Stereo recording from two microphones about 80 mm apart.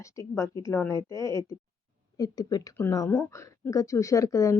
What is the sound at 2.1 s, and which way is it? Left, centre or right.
Speech, left.